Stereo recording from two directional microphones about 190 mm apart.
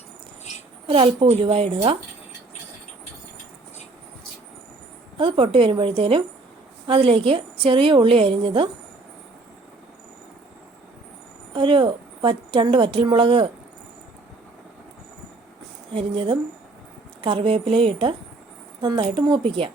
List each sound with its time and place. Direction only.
0.9 s a woman's voice: 30° right (ahead or behind)
5.1 s a woman's voice: 25° right (ahead or behind)
11.5 s a woman's voice: 25° right (ahead or behind)
15.9 s a woman's voice: 25° right (ahead or behind)